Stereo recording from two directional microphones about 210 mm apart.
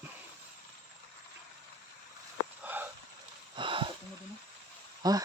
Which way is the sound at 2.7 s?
10° right (ahead or behind).